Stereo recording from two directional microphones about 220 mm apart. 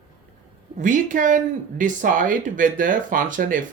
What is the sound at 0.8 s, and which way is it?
Speech, 35° right (ahead or behind).